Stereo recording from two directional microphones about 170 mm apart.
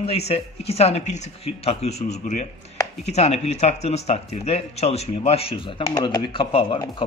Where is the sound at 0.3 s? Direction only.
35° left (ahead or behind).